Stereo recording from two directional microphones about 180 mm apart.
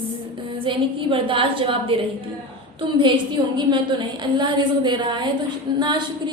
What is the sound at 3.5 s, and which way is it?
A woman's voice, 25° right (ahead or behind).